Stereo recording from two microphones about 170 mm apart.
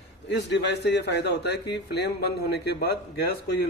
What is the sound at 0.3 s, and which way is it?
A man's voice, 90° left.